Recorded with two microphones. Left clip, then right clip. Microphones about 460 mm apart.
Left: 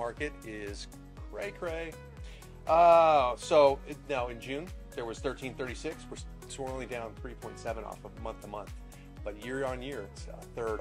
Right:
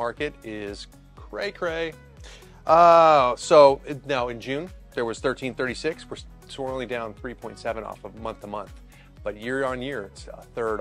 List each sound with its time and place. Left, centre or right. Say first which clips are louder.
0.5 s speech: right 7 dB; right
1.3 s speech: right 9 dB; right
6.1 s speech: right 7 dB; right